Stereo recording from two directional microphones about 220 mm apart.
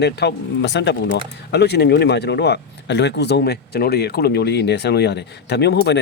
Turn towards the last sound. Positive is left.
turn(degrees=50)  # may be behind; listen again after turning